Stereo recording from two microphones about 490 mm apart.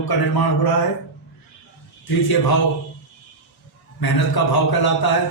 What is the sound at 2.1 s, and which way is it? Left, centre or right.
Speech, left.